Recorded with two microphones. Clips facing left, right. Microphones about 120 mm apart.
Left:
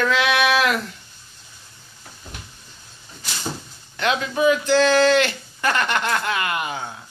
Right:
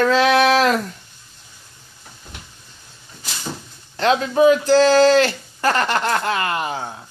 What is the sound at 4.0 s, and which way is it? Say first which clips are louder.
Speech: right 5 dB; 35° right (ahead or behind).